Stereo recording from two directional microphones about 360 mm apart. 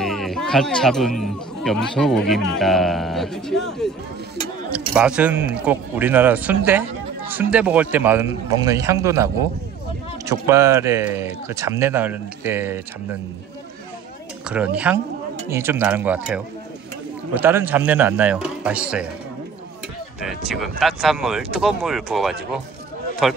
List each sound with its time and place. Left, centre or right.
0.0 s speech: centre
4.7 s speech: centre
14.4 s speech: centre
20.2 s speech: centre